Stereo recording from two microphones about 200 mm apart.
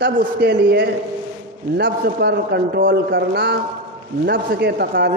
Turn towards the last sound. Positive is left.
turn(degrees=-50)  # may be behind; listen again after turning